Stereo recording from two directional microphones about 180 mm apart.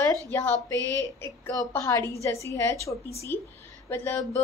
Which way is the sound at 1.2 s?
15° left (ahead or behind).